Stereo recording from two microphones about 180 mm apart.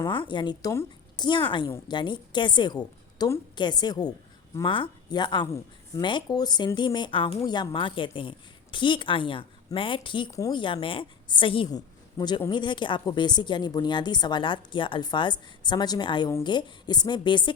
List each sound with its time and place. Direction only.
0.0 s speech: 25° left (ahead or behind)